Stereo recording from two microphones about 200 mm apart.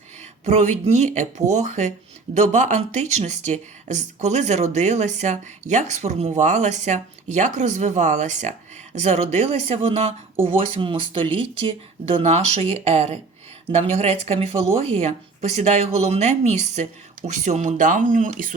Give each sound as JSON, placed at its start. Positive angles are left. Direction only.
{"t": 0.4, "sound": "speech", "side_deg": -35}